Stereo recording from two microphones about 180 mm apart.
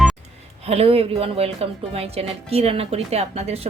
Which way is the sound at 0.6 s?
35° right (ahead or behind).